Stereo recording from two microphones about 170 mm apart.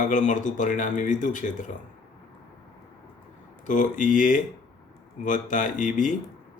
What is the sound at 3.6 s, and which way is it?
Speech, 50° left (ahead or behind).